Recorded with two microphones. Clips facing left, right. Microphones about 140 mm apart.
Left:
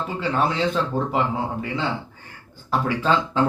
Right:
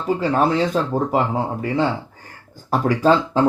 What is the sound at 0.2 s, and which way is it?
Speech, 40° right (ahead or behind).